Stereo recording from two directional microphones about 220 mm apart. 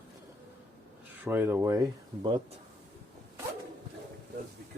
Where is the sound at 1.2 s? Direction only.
10° right (ahead or behind).